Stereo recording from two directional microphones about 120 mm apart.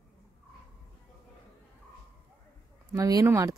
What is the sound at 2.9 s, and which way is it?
Speech, 30° right (ahead or behind).